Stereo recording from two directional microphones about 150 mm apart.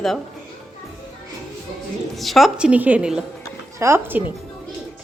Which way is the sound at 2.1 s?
Centre (ahead or behind).